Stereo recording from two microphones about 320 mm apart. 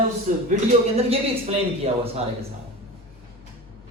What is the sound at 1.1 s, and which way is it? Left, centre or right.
Speech, centre.